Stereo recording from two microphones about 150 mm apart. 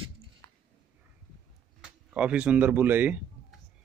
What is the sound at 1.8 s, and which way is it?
Speech, 5° right (ahead or behind).